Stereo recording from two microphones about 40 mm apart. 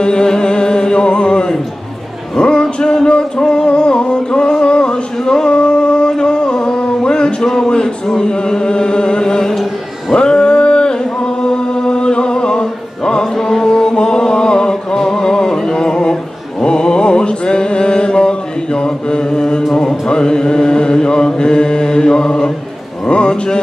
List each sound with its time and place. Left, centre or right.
0.0 s music: centre
2.3 s a sound: left
3.1 s music: left
5.5 s a sound: left
7.4 s chant: centre
10.1 s music: left
16.5 s mantra: left